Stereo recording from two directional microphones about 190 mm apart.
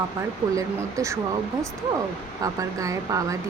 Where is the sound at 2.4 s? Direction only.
15° right (ahead or behind).